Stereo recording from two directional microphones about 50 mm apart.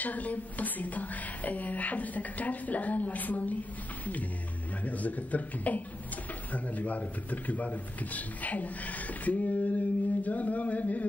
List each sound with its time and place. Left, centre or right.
0.0 s speech: left